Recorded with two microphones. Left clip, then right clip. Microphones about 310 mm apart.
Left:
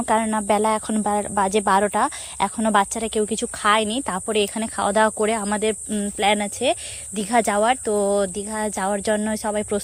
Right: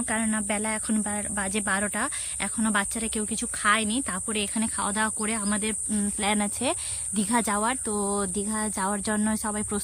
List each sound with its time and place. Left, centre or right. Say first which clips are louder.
0.0 s speech: left 9 dB; centre